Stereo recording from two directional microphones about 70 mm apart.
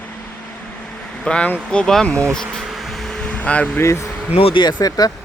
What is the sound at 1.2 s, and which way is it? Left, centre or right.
Speech, centre.